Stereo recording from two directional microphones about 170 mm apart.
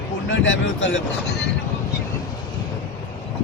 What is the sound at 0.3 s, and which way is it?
Speech, 90° left.